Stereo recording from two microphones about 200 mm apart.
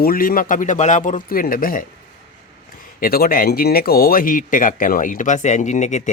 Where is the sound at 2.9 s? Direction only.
45° left (ahead or behind).